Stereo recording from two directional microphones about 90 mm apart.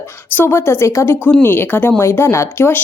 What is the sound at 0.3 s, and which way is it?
A woman's voice, 30° left (ahead or behind).